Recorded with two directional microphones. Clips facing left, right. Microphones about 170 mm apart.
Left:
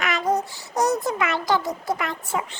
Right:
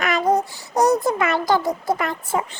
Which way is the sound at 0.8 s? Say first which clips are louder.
Right 4 dB; 35° right (ahead or behind).